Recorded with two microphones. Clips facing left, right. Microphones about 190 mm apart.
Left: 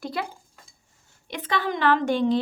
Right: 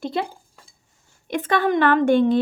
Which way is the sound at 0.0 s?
25° right (ahead or behind).